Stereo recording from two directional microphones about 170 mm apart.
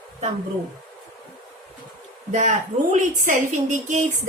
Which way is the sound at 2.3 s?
45° right (ahead or behind).